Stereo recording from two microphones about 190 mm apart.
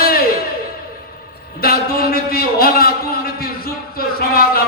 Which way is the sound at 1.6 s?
50° left (ahead or behind).